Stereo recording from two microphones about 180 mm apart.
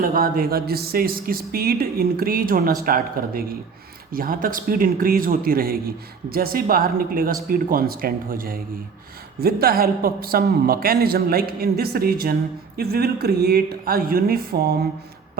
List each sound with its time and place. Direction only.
0.0 s a woman's voice: 55° right (ahead or behind)